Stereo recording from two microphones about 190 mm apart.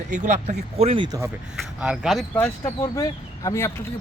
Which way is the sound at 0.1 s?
40° right (ahead or behind).